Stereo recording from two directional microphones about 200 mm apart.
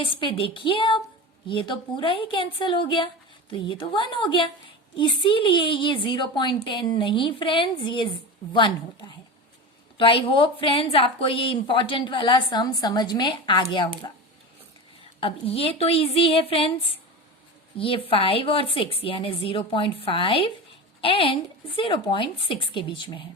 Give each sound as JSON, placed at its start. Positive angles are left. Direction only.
{"t": 0.0, "sound": "a woman's voice", "side_deg": 25}
{"t": 15.2, "sound": "a woman's voice", "side_deg": 30}